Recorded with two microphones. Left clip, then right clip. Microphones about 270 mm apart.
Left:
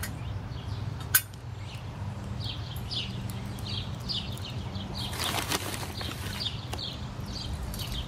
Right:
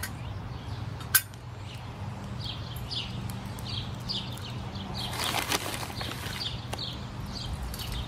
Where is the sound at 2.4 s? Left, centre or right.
Right.